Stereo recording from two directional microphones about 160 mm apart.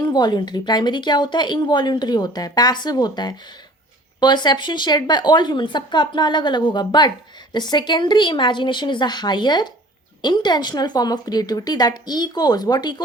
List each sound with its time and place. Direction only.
0.0 s speech: 25° left (ahead or behind)